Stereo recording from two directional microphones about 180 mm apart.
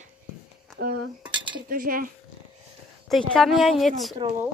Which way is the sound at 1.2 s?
5° right (ahead or behind).